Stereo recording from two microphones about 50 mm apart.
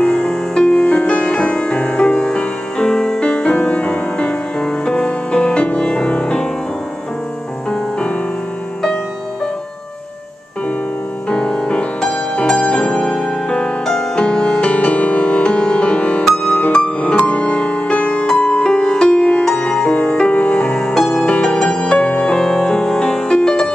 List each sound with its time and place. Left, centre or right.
0.0 s music: centre
11.2 s music: centre
14.7 s music: left
20.7 s music: centre